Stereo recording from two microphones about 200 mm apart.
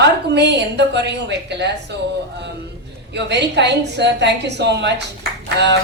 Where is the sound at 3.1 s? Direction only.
60° right (ahead or behind).